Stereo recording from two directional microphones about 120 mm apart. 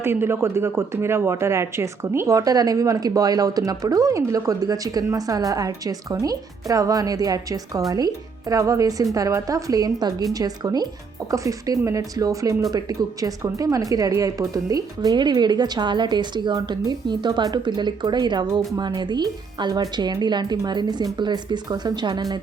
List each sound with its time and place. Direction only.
0.0 s speech: 20° right (ahead or behind); by 22.4 s 35° right (ahead or behind)